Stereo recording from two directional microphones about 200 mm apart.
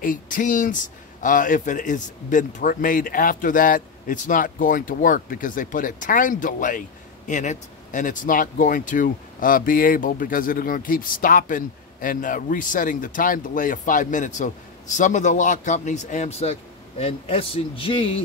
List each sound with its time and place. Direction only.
0.0 s a man's voice: 40° left (ahead or behind)